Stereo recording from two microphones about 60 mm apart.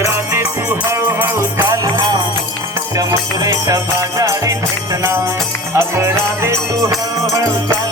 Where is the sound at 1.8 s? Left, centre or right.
Right.